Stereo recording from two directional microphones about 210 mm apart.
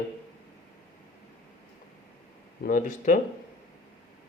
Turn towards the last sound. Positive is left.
turn(degrees=40)  # may be behind; listen again after turning